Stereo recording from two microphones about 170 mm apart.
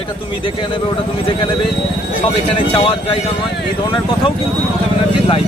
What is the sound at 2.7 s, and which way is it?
Speech, 30° left (ahead or behind).